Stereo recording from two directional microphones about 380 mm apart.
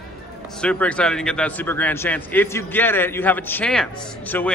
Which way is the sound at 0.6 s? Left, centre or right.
Centre.